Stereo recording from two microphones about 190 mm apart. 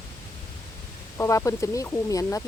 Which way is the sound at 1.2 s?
15° left (ahead or behind).